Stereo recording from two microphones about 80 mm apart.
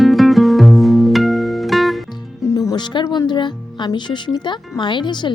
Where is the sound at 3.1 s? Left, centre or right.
Left.